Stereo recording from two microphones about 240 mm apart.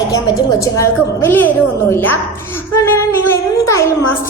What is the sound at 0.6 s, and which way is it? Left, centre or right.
A woman's voice, centre.